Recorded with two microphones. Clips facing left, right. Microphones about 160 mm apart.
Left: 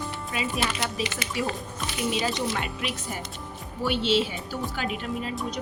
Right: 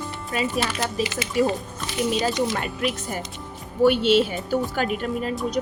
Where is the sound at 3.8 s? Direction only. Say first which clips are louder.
Right 7 dB; 50° right (ahead or behind).